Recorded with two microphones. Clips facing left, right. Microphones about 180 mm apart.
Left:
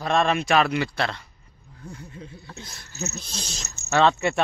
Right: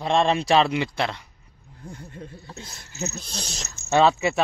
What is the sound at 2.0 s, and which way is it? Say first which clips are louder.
Speech: right 1 dB; 50° right (ahead or behind).